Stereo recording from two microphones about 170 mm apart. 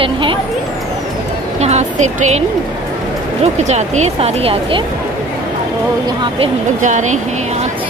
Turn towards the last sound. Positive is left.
turn(degrees=-45)  # may be behind; listen again after turning